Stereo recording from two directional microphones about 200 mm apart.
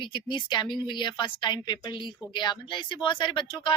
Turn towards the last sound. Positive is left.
turn(degrees=25)  # may be behind; listen again after turning